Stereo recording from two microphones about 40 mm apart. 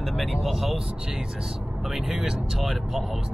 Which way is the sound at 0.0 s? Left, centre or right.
Centre.